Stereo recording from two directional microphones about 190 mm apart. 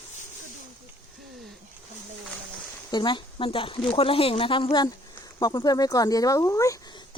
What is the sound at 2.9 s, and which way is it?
Speech, 25° left (ahead or behind).